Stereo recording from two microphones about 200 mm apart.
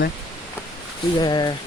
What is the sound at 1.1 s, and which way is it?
Speech, 20° left (ahead or behind).